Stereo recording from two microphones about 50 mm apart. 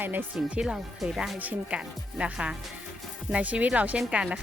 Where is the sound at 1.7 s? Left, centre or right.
Right.